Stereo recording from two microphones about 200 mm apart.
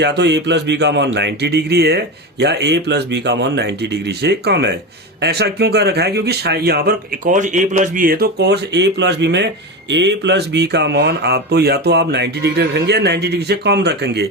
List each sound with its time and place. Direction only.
0.0 s a man's voice: 55° right (ahead or behind)